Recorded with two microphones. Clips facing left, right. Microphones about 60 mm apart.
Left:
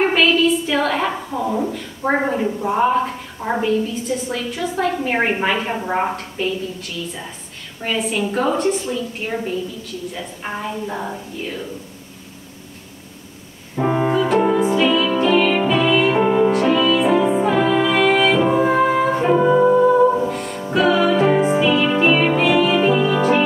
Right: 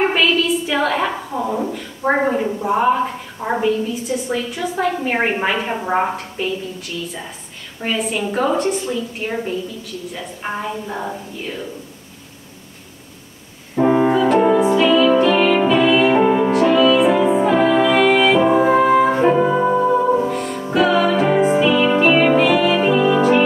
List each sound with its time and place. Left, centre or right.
0.2 s a woman's voice: centre
7.8 s a woman's voice: centre
13.7 s piano: centre
14.6 s music: centre; by 19.8 s right
19.8 s music: centre